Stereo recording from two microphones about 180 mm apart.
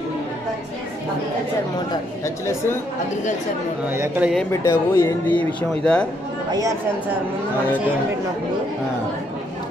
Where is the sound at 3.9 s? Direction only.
10° right (ahead or behind).